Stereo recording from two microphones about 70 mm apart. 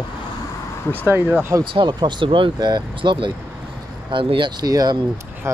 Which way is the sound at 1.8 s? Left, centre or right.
Right.